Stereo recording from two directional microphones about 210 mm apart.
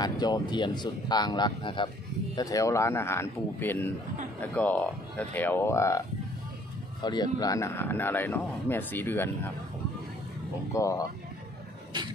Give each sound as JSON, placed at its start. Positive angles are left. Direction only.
{"t": 0.0, "sound": "a man's voice", "side_deg": 20}
{"t": 10.7, "sound": "a man's voice", "side_deg": 15}